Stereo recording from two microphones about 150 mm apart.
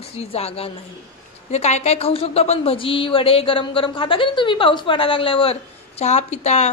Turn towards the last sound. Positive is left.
turn(degrees=50)  # may be behind; listen again after turning